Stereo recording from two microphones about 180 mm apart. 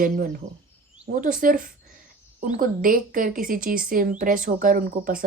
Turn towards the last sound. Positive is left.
turn(degrees=-50)  # may be behind; listen again after turning